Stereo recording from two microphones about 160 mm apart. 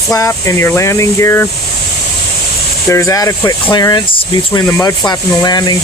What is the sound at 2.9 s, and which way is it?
Speech, 20° left (ahead or behind).